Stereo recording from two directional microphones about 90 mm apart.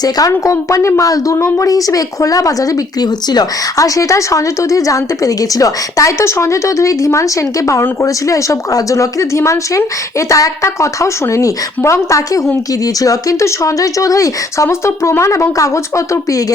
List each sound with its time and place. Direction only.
0.0 s speech: 40° left (ahead or behind)